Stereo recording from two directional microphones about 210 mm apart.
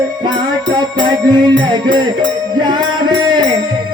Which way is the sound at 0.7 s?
20° right (ahead or behind).